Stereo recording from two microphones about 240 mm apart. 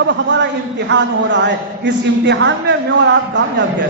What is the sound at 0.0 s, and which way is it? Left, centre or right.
A man's voice, right.